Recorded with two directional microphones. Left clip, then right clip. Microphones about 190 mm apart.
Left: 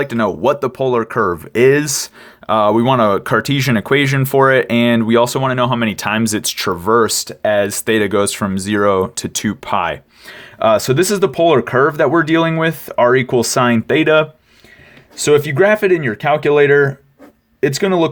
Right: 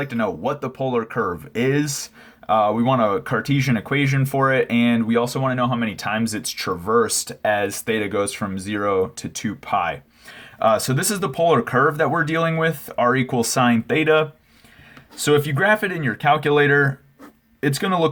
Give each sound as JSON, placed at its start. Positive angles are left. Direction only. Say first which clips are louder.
{"t": 0.0, "sound": "speech", "louder": "left 8 dB", "side_deg": 50}